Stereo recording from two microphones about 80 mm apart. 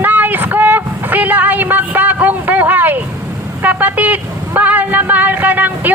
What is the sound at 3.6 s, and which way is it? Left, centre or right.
Speech, right.